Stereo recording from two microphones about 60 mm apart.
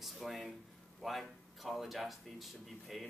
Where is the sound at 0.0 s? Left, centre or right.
Centre.